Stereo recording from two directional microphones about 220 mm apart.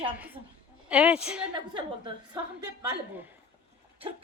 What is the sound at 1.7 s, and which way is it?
Speech, 20° right (ahead or behind).